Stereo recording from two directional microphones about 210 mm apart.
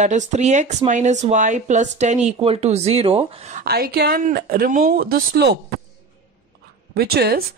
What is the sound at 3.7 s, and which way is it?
Speech, 45° right (ahead or behind).